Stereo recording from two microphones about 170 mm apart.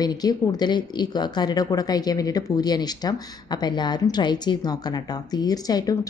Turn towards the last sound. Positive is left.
turn(degrees=20)  # may be behind; listen again after turning